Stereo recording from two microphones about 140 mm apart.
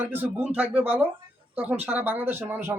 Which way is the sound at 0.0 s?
15° right (ahead or behind).